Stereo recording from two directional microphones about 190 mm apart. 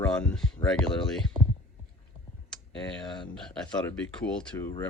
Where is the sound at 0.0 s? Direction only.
5° left (ahead or behind).